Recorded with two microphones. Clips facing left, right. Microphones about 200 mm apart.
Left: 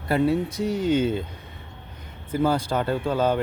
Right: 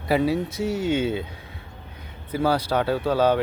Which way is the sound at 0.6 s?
5° right (ahead or behind).